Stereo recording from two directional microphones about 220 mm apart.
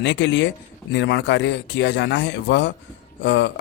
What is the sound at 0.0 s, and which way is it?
Speech, 55° left (ahead or behind).